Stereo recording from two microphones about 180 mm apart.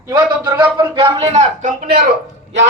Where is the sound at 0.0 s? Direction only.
20° right (ahead or behind); by 1.7 s 40° right (ahead or behind).